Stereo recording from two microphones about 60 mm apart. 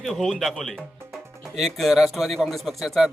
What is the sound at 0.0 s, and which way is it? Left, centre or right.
Speech, centre.